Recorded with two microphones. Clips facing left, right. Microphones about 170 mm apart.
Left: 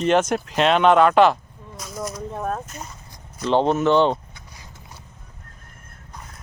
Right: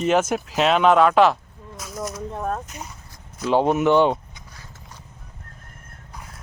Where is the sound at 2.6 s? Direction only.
15° right (ahead or behind).